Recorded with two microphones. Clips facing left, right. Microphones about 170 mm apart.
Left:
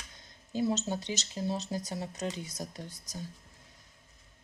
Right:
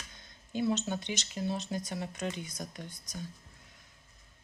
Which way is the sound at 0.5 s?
35° left (ahead or behind).